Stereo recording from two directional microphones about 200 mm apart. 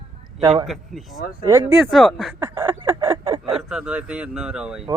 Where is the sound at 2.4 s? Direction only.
10° right (ahead or behind).